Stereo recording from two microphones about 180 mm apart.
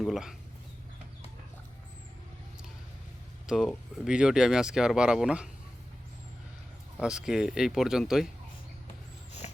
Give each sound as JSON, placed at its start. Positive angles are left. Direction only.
{"t": 0.0, "sound": "speech", "side_deg": 0}
{"t": 3.4, "sound": "speech", "side_deg": 0}
{"t": 7.0, "sound": "speech", "side_deg": -5}